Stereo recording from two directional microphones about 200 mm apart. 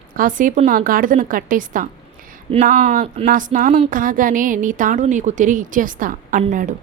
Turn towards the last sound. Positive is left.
turn(degrees=-40)  # may be behind; listen again after turning